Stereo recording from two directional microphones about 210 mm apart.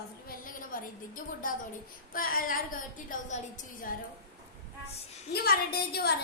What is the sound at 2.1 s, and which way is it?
Child singing, 40° left (ahead or behind).